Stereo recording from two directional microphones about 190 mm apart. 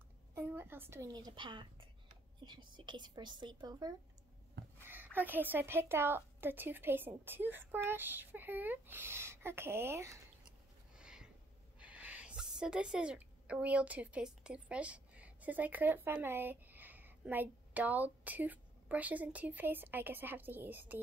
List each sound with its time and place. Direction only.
0.3 s speech: 10° right (ahead or behind)
4.8 s a woman's voice: 10° right (ahead or behind)
11.0 s a sound: 5° right (ahead or behind)
11.8 s a woman's voice: 5° right (ahead or behind)